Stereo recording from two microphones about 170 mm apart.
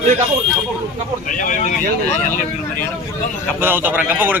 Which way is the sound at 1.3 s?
50° left (ahead or behind).